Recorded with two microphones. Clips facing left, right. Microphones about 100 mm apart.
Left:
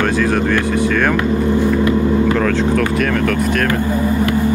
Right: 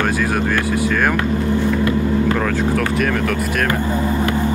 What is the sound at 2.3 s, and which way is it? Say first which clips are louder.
Speech: left 3 dB; 10° right (ahead or behind).